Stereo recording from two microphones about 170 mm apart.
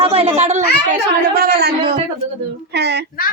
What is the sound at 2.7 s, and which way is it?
Speech, 80° right.